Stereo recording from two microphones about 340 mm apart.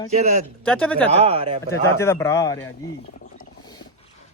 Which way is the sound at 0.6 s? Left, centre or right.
Centre.